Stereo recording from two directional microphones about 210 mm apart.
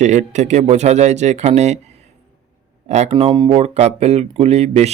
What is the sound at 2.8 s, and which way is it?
Speech, 30° right (ahead or behind).